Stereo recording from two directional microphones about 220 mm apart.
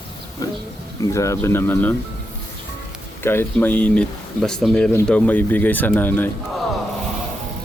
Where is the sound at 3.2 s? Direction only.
10° left (ahead or behind).